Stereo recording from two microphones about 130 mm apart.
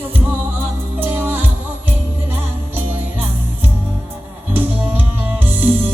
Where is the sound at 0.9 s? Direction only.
15° right (ahead or behind).